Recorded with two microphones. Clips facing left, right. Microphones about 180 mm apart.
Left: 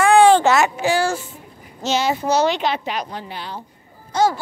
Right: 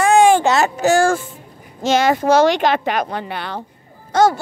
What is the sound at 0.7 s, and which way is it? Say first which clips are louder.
Speech: right 5 dB; 45° right (ahead or behind).